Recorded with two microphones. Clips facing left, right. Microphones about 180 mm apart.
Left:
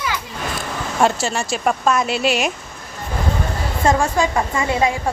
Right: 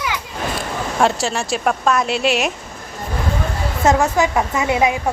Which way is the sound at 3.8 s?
5° right (ahead or behind).